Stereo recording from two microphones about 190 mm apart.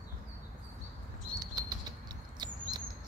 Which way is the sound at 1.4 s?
20° right (ahead or behind).